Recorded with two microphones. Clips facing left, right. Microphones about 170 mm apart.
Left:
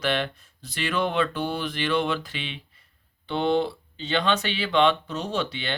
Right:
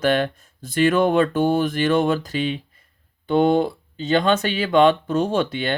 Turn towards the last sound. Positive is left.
turn(degrees=-50)  # may be behind; listen again after turning